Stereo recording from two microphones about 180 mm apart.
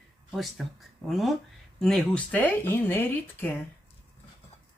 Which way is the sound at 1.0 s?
Centre (ahead or behind).